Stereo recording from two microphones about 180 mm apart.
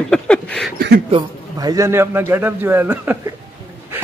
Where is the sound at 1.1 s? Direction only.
20° right (ahead or behind).